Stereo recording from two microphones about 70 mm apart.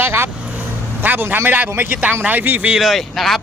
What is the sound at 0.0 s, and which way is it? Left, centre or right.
Vehicle, right.